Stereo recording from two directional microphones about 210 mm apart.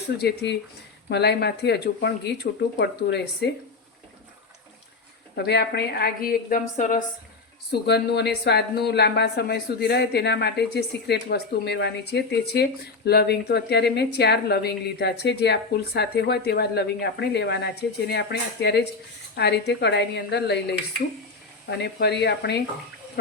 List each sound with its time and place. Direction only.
0.2 s a woman's voice: 50° left (ahead or behind)
5.4 s a woman's voice: 50° left (ahead or behind)
7.7 s a woman's voice: 50° left (ahead or behind)